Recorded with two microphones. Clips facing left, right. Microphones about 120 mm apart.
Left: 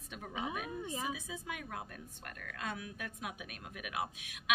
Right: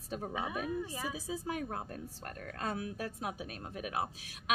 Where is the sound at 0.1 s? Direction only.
35° right (ahead or behind).